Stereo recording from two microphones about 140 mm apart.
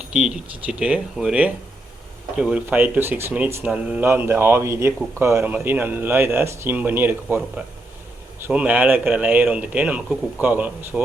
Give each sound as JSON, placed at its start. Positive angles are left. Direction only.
{"t": 0.0, "sound": "a man's voice", "side_deg": -5}